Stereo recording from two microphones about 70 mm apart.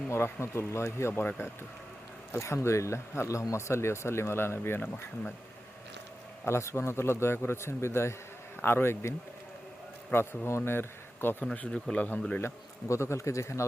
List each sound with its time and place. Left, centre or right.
0.1 s a man's voice: left
2.4 s a man's voice: left
6.4 s a man's voice: left
11.5 s speech: centre
12.9 s speech: left